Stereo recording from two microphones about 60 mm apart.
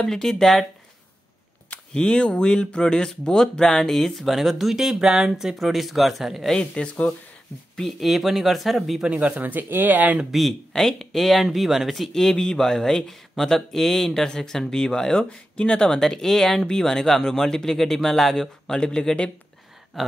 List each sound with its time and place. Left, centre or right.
0.0 s speech: centre
2.0 s speech: centre
6.5 s speech: centre
8.0 s speech: centre
9.0 s speech: centre
10.3 s speech: centre
19.9 s speech: centre